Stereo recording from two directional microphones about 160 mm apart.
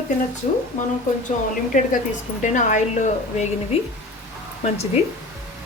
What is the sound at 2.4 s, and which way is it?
Speech, 50° left (ahead or behind).